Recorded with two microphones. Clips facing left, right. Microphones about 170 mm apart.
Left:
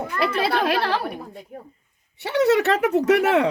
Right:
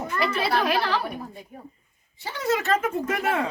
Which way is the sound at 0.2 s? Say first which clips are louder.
Left 3 dB; 65° left (ahead or behind).